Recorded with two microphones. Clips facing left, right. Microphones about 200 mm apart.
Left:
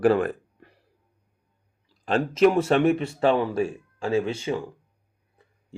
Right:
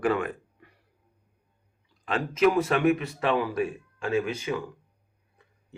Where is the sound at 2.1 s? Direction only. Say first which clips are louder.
Left 4 dB; 30° left (ahead or behind).